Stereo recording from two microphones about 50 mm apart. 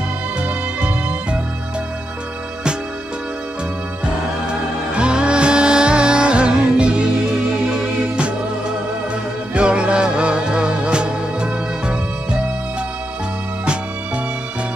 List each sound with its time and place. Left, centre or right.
0.4 s music: right
4.0 s music: right
9.5 s music: right